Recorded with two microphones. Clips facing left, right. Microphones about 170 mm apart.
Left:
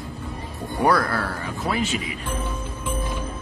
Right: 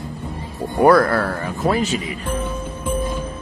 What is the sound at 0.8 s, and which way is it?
Speech, 50° right (ahead or behind).